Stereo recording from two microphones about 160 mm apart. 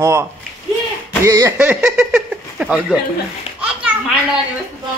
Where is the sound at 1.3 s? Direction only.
20° right (ahead or behind).